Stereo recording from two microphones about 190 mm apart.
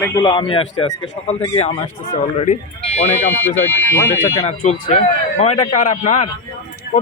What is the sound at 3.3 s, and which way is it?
Speech, 10° left (ahead or behind).